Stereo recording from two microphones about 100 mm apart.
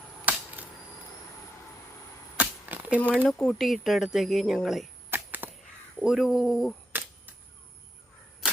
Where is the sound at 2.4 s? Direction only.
15° right (ahead or behind).